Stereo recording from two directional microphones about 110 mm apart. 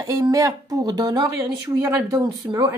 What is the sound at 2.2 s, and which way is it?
Speech, 40° right (ahead or behind).